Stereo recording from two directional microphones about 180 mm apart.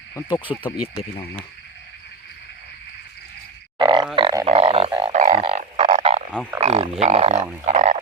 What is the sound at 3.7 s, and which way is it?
Grunt, 25° right (ahead or behind).